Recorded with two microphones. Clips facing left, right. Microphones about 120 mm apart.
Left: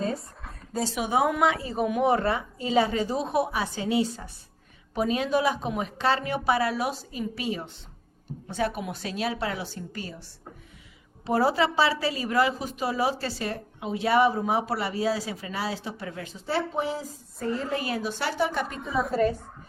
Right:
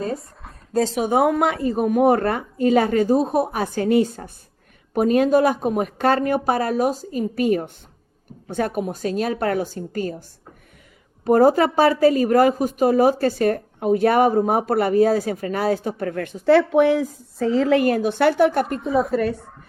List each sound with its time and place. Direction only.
0.9 s speech: 45° right (ahead or behind)
11.3 s speech: 45° right (ahead or behind); by 17.8 s 90° right
17.8 s a woman's voice: 50° right (ahead or behind)
18.9 s a woman's voice: centre (ahead or behind)